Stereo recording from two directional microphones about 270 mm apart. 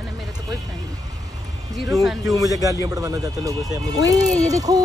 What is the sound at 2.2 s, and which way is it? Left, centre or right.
Speech, centre.